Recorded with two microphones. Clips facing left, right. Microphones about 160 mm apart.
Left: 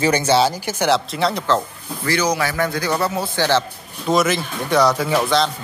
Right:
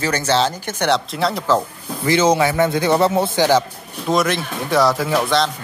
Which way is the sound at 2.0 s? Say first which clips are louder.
Right 5 dB; 25° right (ahead or behind).